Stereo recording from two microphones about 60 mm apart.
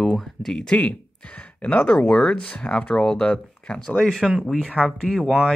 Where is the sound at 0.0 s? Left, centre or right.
Centre.